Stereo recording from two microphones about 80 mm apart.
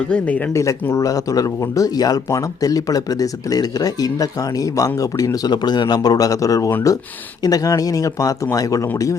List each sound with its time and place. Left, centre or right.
0.1 s speech: centre
0.5 s speech: left